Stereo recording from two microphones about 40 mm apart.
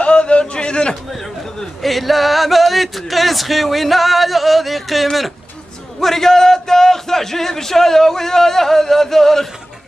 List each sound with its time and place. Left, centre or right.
0.0 s a sound: left
1.8 s speech: centre
5.9 s a man's voice: centre